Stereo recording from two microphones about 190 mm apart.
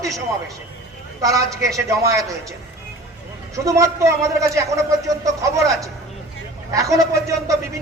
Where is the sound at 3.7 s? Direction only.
15° right (ahead or behind).